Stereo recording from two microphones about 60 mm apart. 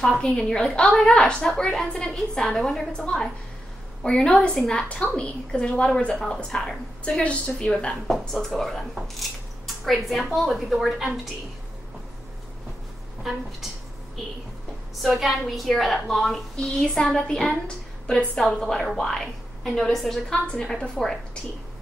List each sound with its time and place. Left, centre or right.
0.0 s a woman's voice: centre
8.1 s a woman's voice: centre
13.2 s a woman's voice: centre
15.0 s a woman's voice: centre
16.5 s a woman's voice: centre